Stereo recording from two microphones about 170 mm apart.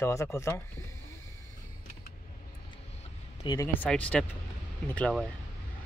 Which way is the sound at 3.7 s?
10° left (ahead or behind).